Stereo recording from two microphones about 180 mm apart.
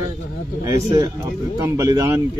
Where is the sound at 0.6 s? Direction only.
15° right (ahead or behind).